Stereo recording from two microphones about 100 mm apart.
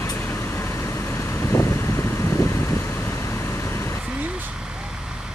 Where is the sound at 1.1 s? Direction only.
25° left (ahead or behind).